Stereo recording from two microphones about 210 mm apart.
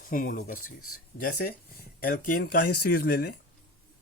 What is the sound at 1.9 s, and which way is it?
Speech, 45° left (ahead or behind).